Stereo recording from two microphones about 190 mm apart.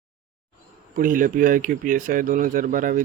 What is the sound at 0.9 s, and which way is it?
Speech, 45° right (ahead or behind).